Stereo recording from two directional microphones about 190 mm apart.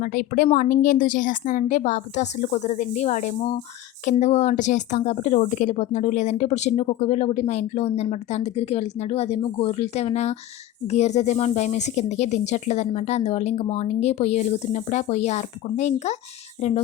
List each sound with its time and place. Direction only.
0.0 s speech: 45° left (ahead or behind)